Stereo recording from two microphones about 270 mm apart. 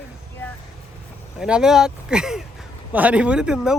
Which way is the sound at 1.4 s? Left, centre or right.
Centre.